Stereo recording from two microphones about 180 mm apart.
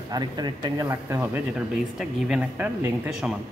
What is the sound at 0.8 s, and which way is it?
Speech, 10° right (ahead or behind).